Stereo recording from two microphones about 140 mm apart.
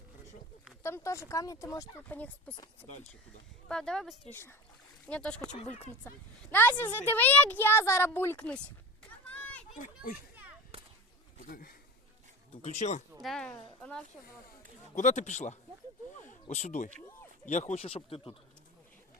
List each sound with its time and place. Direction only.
0.8 s speech: 20° left (ahead or behind)
2.0 s a woman's voice: 10° left (ahead or behind)
3.7 s speech: 5° left (ahead or behind)
4.3 s a woman's voice: 15° left (ahead or behind)
9.3 s children playing: 10° left (ahead or behind)
9.8 s a child's voice: 90° left
10.7 s whip: 45° right (ahead or behind)
11.4 s speech: 90° left
12.6 s speech: 55° left (ahead or behind)
13.2 s speech: 5° left (ahead or behind)
14.9 s speech: 60° left (ahead or behind); by 18.3 s 40° left (ahead or behind)